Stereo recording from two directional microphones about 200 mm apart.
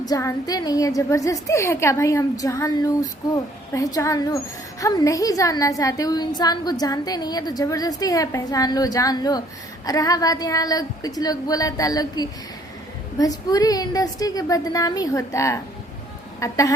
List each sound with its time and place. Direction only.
0.0 s a woman's voice: 15° left (ahead or behind)